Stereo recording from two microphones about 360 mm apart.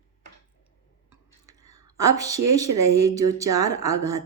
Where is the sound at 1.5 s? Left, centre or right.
Centre.